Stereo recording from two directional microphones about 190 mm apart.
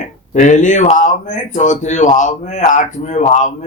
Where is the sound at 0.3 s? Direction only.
40° left (ahead or behind).